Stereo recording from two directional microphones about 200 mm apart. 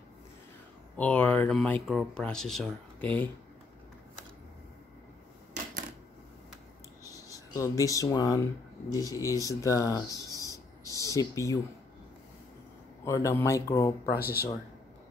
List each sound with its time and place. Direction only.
0.9 s speech: 5° left (ahead or behind)
7.1 s speech: 15° left (ahead or behind)
13.0 s speech: 15° left (ahead or behind)
14.1 s speech: 50° left (ahead or behind)